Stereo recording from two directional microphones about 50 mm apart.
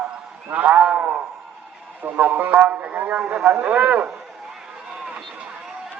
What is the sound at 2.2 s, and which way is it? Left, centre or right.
A man's voice, right.